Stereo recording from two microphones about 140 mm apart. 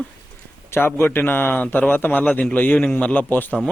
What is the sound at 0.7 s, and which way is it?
A man's voice, 15° left (ahead or behind).